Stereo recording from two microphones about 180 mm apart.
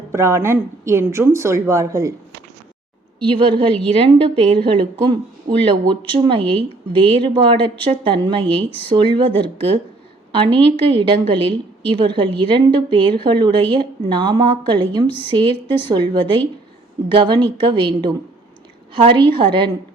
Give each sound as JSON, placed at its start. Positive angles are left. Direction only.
{"t": 0.1, "sound": "speech", "side_deg": -15}
{"t": 3.2, "sound": "a woman's voice", "side_deg": -30}